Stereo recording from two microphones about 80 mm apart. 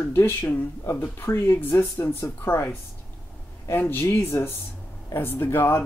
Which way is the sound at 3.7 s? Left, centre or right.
Left.